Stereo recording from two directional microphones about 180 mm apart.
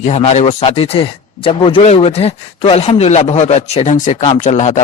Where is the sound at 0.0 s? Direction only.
40° left (ahead or behind).